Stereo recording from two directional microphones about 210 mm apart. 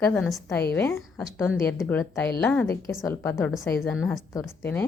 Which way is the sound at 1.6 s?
10° left (ahead or behind).